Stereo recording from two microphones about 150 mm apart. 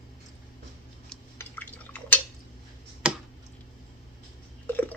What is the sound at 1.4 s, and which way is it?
Drip, 10° left (ahead or behind).